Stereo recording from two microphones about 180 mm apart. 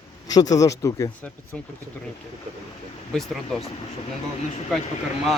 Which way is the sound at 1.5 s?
5° left (ahead or behind).